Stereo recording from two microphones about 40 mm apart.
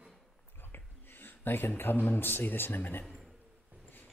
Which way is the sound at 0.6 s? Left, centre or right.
Left.